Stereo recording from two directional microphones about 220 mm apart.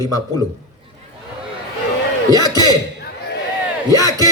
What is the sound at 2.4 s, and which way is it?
Speech, 20° left (ahead or behind).